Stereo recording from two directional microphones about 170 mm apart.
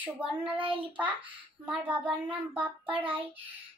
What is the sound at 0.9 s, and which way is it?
Child singing, 10° right (ahead or behind).